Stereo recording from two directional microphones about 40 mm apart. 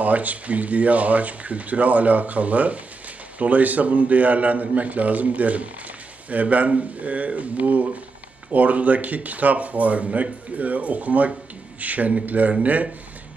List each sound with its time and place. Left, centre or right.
0.0 s speech: right